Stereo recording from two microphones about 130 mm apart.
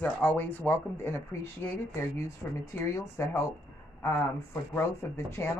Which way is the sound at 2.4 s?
10° left (ahead or behind).